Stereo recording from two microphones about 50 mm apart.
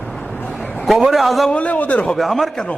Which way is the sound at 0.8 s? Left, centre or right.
Centre.